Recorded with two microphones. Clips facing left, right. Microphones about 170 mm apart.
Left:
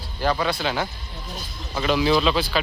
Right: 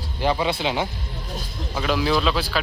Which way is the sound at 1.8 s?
Centre (ahead or behind).